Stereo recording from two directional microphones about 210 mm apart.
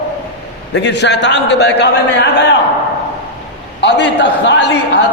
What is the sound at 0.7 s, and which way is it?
A man's voice, 55° left (ahead or behind).